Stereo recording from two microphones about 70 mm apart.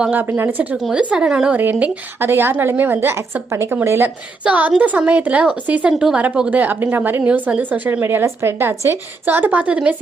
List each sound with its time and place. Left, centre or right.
0.1 s a woman's voice: right
2.1 s a woman's voice: right
4.4 s speech: right
5.9 s speech: centre
6.1 s speech: centre
8.0 s a woman's voice: right; by 10.0 s centre